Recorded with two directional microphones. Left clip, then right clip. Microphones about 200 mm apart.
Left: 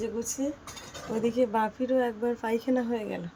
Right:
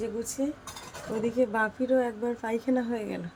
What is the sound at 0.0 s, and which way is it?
Speech, centre (ahead or behind).